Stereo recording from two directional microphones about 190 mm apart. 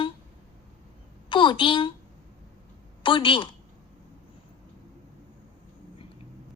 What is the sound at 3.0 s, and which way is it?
Speech, 25° left (ahead or behind).